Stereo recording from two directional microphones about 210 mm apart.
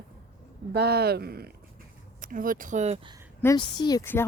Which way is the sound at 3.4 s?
15° left (ahead or behind).